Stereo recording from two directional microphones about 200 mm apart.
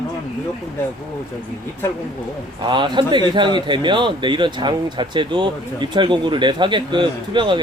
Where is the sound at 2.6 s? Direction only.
25° right (ahead or behind).